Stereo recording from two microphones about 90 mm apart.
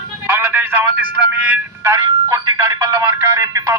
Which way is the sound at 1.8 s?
35° right (ahead or behind).